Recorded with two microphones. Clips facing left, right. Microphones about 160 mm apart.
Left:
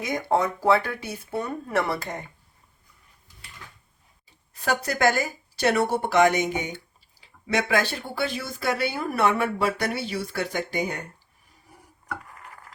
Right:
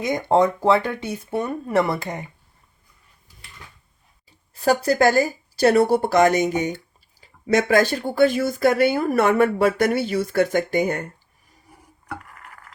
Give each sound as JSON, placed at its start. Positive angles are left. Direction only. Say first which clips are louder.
{"t": 0.1, "sound": "speech", "louder": "right 6 dB", "side_deg": -20}
{"t": 4.6, "sound": "speech", "louder": "right 6 dB", "side_deg": -35}